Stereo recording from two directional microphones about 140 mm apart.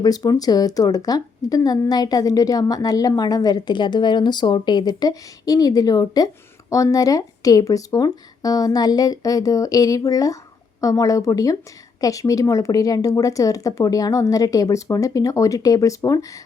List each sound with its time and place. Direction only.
0.0 s a woman's voice: 30° left (ahead or behind)